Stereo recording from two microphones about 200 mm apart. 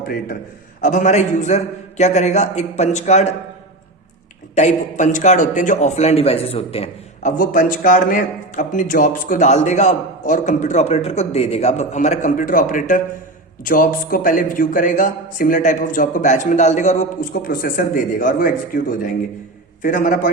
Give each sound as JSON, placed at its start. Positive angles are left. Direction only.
{"t": 0.8, "sound": "a man's voice", "side_deg": 40}
{"t": 4.5, "sound": "a man's voice", "side_deg": 35}